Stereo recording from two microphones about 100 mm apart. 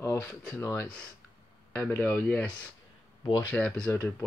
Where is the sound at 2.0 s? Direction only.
10° left (ahead or behind).